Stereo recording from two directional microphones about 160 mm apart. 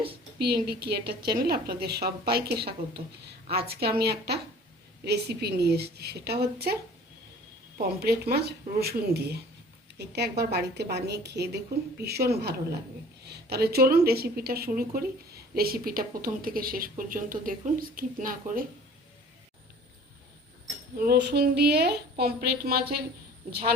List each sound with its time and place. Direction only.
0.3 s a woman's voice: 75° right (ahead or behind)
3.7 s a woman's voice: 75° right (ahead or behind)
7.8 s a woman's voice: 75° right (ahead or behind)
21.0 s a woman's voice: 80° right
22.2 s a woman's voice: 75° right (ahead or behind)